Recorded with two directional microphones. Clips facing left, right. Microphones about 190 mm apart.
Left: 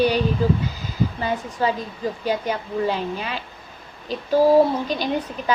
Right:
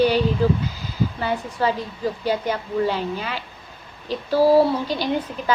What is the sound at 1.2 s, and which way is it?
A woman's voice, 15° left (ahead or behind).